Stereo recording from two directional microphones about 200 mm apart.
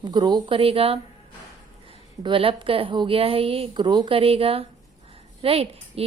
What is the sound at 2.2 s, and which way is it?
A woman's voice, 25° right (ahead or behind).